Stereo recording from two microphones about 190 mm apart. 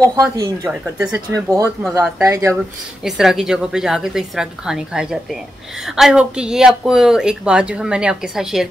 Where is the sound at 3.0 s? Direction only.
Centre (ahead or behind).